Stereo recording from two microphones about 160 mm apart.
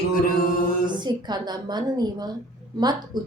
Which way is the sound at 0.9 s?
25° right (ahead or behind).